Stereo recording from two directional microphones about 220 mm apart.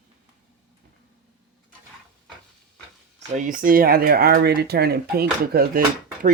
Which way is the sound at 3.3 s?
35° right (ahead or behind).